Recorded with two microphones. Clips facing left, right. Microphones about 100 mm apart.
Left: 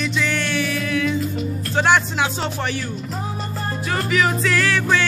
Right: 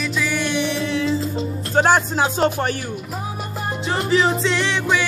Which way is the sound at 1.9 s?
35° right (ahead or behind).